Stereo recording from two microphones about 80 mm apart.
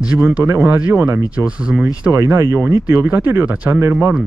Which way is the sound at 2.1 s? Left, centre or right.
Right.